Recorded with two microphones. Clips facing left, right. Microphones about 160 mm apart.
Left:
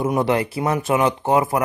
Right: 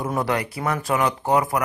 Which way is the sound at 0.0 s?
25° left (ahead or behind).